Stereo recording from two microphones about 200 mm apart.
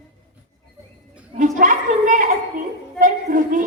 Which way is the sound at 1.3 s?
40° right (ahead or behind).